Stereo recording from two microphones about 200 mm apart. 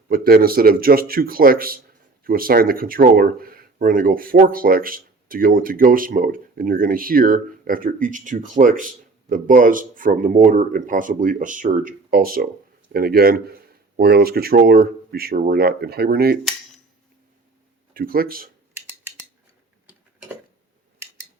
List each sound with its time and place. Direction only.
0.1 s speech: 50° right (ahead or behind)
17.9 s speech: 45° right (ahead or behind)
19.9 s tick-tock: 5° right (ahead or behind)